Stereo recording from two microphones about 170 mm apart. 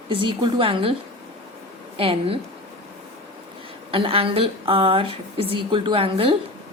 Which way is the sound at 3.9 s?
30° right (ahead or behind).